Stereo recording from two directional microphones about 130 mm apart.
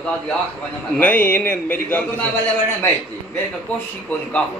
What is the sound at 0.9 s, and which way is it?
A man's voice, 10° left (ahead or behind).